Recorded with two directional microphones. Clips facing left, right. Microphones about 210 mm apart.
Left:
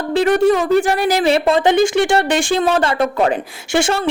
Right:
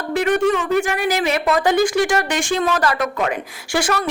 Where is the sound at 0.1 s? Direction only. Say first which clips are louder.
Left 4 dB; 35° left (ahead or behind).